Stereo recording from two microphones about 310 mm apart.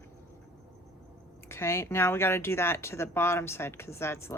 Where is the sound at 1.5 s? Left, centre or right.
Centre.